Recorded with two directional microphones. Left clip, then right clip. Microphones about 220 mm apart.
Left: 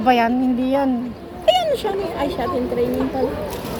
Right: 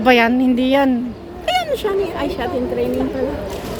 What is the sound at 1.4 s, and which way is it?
Speech, 25° right (ahead or behind).